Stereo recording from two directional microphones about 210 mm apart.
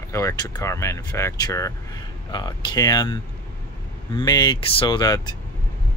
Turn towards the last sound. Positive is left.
turn(degrees=20)  # may be behind; listen again after turning